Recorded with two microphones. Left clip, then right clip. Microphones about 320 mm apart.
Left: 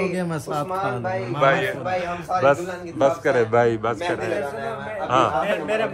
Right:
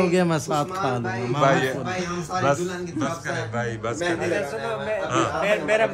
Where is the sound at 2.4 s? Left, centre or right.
Centre.